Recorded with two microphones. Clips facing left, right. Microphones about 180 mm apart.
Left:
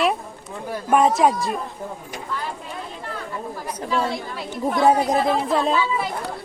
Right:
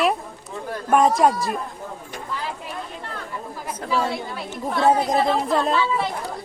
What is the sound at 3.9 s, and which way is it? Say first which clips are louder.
Speech: even; 5° right (ahead or behind).